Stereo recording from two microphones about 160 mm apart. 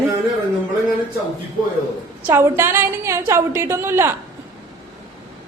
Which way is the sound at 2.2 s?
15° right (ahead or behind).